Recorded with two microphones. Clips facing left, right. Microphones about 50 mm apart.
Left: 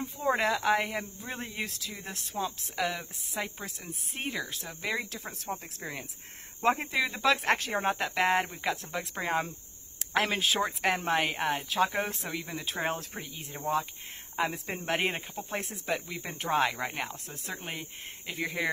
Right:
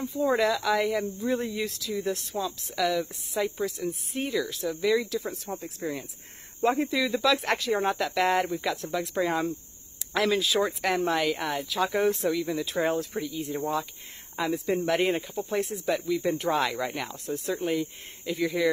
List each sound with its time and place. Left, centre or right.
0.0 s speech: left
5.2 s speech: left
7.8 s speech: left
8.9 s speech: left
12.6 s speech: left
15.0 s speech: left